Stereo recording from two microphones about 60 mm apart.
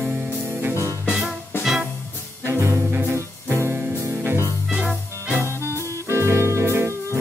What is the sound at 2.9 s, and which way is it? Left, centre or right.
Music, right.